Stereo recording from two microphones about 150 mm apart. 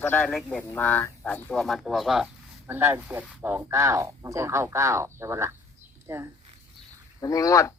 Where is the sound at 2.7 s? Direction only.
15° right (ahead or behind).